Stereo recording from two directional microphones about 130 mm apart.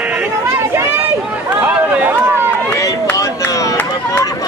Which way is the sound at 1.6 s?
15° right (ahead or behind).